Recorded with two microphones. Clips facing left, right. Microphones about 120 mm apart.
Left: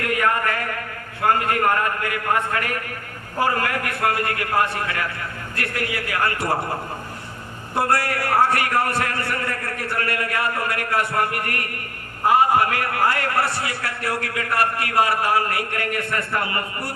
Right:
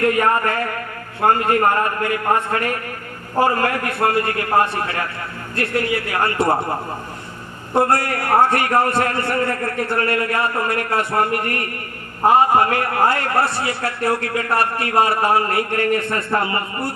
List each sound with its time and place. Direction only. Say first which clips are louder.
0.0 s a man's voice: right 5 dB; 35° right (ahead or behind)
7.8 s a man's voice: right 4 dB; 25° right (ahead or behind)